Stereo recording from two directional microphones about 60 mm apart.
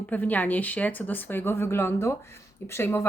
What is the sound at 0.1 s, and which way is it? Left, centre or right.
Speech, left.